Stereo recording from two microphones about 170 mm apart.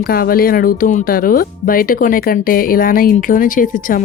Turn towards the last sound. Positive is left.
turn(degrees=50)  # may be behind; listen again after turning